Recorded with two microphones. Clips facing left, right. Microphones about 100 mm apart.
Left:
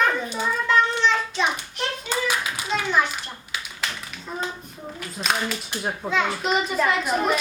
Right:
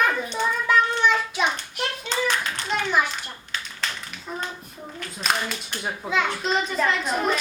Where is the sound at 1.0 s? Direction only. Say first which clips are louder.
Even; 10° right (ahead or behind).